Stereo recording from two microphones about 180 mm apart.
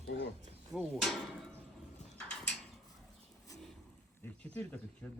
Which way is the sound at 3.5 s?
20° left (ahead or behind).